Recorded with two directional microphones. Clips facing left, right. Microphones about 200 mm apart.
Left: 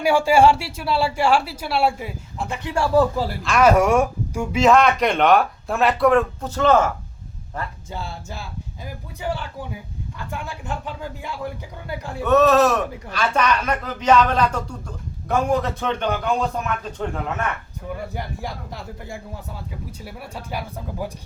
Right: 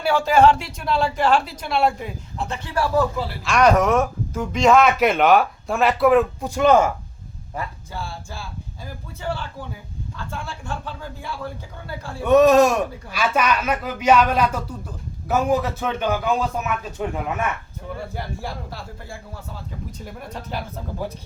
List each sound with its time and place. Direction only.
0.0 s speech: 10° left (ahead or behind)
2.6 s speech: 25° left (ahead or behind)
3.4 s speech: 5° left (ahead or behind); by 6.9 s 10° right (ahead or behind)
7.9 s speech: 20° left (ahead or behind)
12.2 s speech: 15° right (ahead or behind)
18.1 s speech: 15° left (ahead or behind)
20.0 s speech: 10° left (ahead or behind)